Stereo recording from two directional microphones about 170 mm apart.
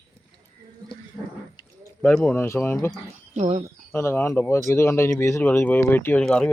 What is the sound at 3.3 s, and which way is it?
Speech, 40° right (ahead or behind).